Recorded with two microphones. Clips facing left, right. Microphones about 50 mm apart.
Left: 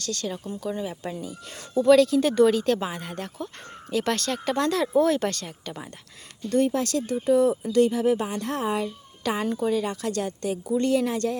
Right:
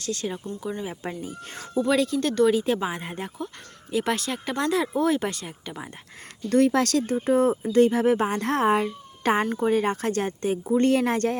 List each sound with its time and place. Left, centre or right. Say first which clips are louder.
0.0 s speech: right 1 dB; right
1.7 s speech: left 5 dB; centre
2.5 s speech: even; centre
2.9 s speech: right 1 dB; right
3.9 s speech: even; centre
6.5 s speech: right 3 dB; right
7.1 s speech: left 4 dB; right